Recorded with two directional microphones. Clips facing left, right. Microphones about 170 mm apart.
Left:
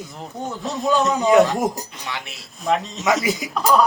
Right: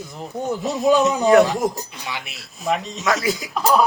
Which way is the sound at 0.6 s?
10° right (ahead or behind).